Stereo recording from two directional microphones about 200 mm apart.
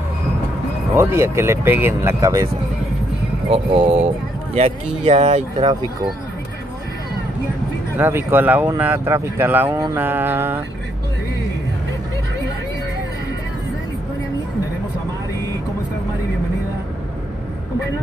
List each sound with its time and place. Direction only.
0.9 s speech: 15° right (ahead or behind)
3.4 s speech: 30° right (ahead or behind)
8.0 s speech: 10° right (ahead or behind)